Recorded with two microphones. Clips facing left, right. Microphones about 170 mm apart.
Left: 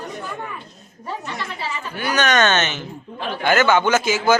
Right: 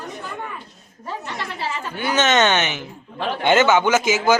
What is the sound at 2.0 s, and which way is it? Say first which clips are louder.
A man's voice: right 1 dB; 20° right (ahead or behind).